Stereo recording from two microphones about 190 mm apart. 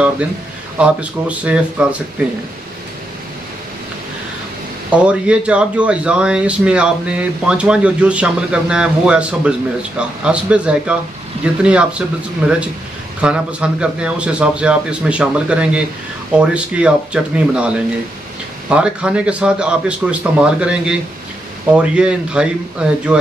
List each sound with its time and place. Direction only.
0.7 s speech: 5° right (ahead or behind)
4.9 s speech: 5° right (ahead or behind)